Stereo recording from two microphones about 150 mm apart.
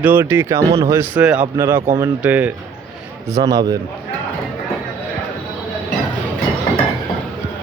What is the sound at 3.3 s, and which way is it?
Speech, 20° right (ahead or behind).